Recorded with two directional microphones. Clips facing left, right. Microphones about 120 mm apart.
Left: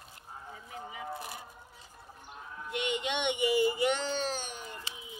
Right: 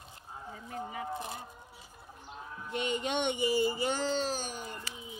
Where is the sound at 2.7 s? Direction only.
40° right (ahead or behind).